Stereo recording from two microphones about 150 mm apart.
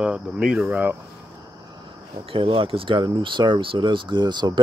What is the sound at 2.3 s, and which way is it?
Speech, 35° right (ahead or behind).